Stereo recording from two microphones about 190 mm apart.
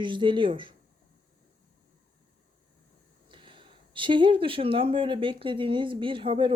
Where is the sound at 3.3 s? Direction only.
25° right (ahead or behind).